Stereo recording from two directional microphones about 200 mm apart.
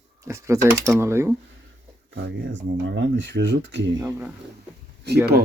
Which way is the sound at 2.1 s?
60° right (ahead or behind).